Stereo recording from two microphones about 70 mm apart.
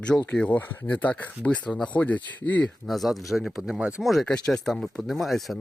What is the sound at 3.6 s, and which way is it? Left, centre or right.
Speech, centre.